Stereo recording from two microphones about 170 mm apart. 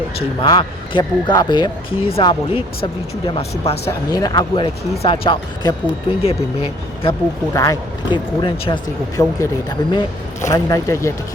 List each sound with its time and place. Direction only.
0.2 s speech: 30° left (ahead or behind)
3.8 s speech: 20° left (ahead or behind)
7.5 s speech: 20° left (ahead or behind)